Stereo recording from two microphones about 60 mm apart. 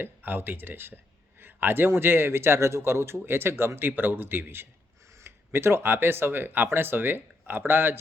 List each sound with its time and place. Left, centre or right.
0.0 s a man's voice: right